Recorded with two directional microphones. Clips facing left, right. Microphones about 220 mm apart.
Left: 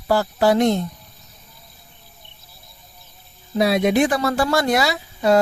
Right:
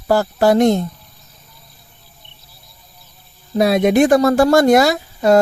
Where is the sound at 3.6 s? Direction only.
50° right (ahead or behind).